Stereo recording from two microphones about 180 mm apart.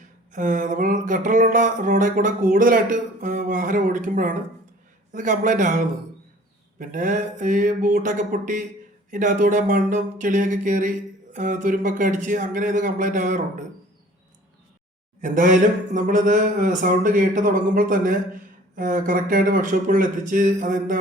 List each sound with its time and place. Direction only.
0.3 s speech: 45° right (ahead or behind)
15.2 s speech: 45° right (ahead or behind)